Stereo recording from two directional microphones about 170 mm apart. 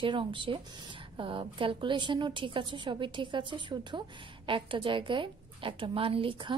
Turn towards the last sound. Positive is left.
turn(degrees=-35)  # may be behind; listen again after turning